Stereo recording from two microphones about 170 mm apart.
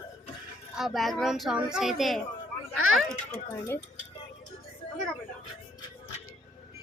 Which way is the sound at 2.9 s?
15° left (ahead or behind).